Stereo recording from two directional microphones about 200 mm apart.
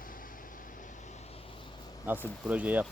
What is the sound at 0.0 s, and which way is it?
Vehicle, 45° left (ahead or behind).